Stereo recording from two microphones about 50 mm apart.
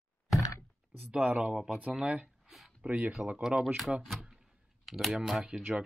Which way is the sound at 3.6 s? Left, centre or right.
Centre.